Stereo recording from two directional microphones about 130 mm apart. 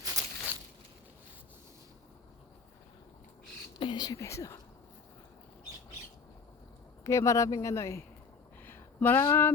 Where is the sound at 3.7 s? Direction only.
35° left (ahead or behind); by 4.6 s 20° left (ahead or behind).